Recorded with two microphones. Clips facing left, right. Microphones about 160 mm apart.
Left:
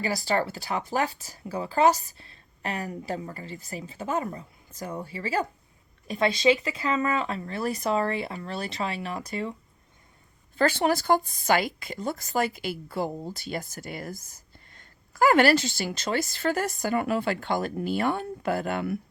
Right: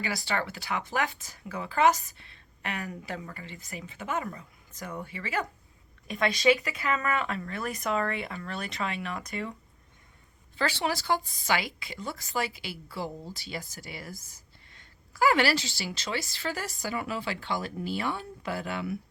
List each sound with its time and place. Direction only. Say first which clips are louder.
0.0 s speech: left 5 dB; 40° left (ahead or behind)
10.6 s speech: left 6 dB; 45° left (ahead or behind)